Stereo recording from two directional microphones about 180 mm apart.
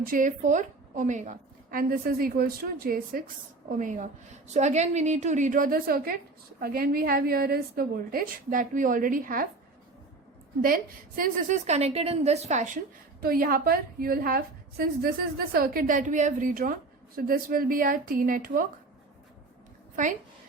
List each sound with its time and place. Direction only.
0.0 s a woman's voice: 50° right (ahead or behind)
11.2 s a woman's voice: 45° right (ahead or behind)
13.2 s a woman's voice: 55° right (ahead or behind)